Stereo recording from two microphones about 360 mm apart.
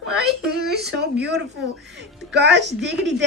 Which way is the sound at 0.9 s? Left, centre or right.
Right.